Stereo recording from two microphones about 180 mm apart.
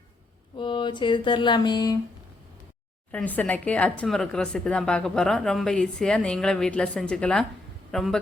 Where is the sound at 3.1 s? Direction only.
10° left (ahead or behind).